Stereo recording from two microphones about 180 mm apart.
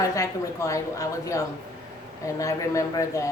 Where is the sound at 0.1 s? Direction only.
15° left (ahead or behind).